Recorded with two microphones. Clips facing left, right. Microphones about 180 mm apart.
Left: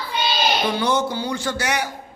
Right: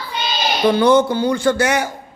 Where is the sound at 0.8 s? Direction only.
55° right (ahead or behind).